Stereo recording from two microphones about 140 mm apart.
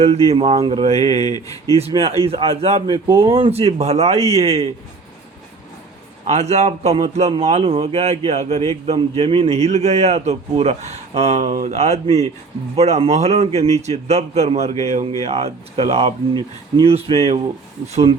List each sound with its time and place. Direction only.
0.3 s a man's voice: 45° right (ahead or behind)
1.2 s speech: 25° left (ahead or behind)
1.9 s a man's voice: 45° right (ahead or behind)
6.2 s a man's voice: 55° right (ahead or behind)